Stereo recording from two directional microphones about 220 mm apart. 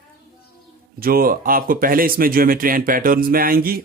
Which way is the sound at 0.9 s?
40° right (ahead or behind).